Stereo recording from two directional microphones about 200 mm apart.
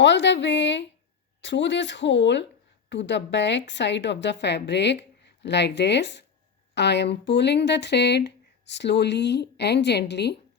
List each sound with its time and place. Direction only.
0.0 s speech: 60° left (ahead or behind)